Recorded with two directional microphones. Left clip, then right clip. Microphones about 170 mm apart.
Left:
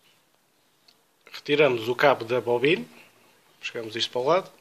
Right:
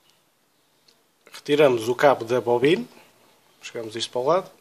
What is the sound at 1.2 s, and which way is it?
Speech, 15° right (ahead or behind).